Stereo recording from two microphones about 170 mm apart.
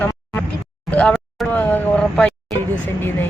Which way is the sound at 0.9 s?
5° left (ahead or behind).